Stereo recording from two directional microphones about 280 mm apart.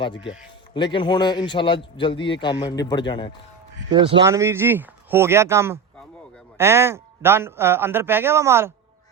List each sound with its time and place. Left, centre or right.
0.3 s a man's voice: centre
3.9 s a man's voice: centre